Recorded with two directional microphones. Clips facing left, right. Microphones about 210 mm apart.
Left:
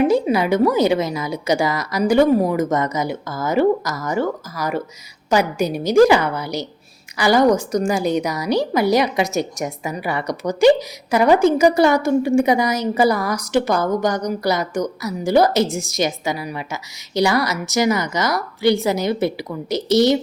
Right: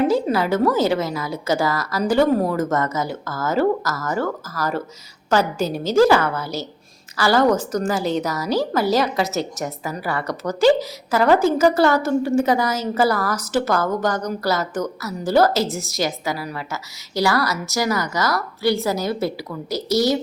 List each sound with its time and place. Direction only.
0.0 s a woman's voice: 15° left (ahead or behind)